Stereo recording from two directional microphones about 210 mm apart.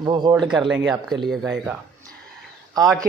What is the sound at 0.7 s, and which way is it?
Speech, 5° right (ahead or behind).